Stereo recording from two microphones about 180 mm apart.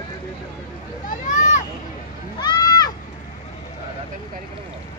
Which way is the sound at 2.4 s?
20° left (ahead or behind).